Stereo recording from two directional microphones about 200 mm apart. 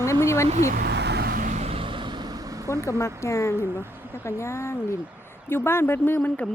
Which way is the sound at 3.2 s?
15° left (ahead or behind).